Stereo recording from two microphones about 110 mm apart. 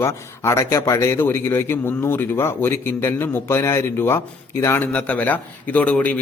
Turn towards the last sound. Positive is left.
turn(degrees=10)  # may be behind; listen again after turning